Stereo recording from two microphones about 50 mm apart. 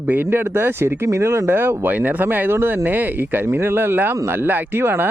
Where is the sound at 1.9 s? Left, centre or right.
Right.